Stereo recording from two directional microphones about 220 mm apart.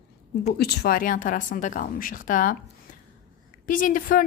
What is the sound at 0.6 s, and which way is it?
A woman's voice, 45° left (ahead or behind).